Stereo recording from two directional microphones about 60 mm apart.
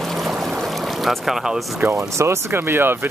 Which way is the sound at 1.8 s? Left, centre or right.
Right.